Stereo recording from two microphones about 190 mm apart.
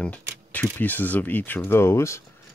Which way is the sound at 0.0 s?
10° left (ahead or behind).